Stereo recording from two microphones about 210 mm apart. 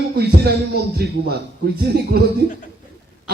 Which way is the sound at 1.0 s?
45° right (ahead or behind).